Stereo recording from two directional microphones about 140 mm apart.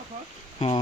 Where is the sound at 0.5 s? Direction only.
45° left (ahead or behind).